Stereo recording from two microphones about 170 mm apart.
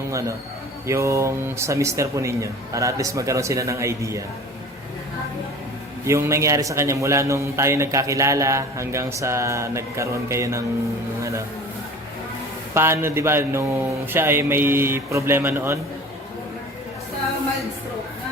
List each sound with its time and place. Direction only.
0.1 s a man's voice: 20° right (ahead or behind)
6.1 s a man's voice: 15° right (ahead or behind)
12.7 s a man's voice: 15° right (ahead or behind)